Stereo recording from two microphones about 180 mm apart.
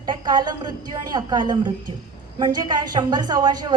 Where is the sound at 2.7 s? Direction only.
25° right (ahead or behind).